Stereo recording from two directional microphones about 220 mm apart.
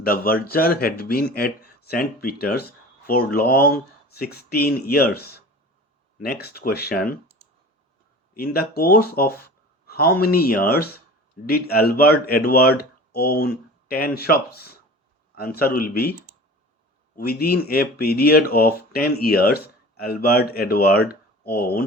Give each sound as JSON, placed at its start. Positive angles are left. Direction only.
{"t": 0.0, "sound": "speech", "side_deg": 40}
{"t": 8.4, "sound": "speech", "side_deg": 45}
{"t": 17.2, "sound": "speech", "side_deg": 45}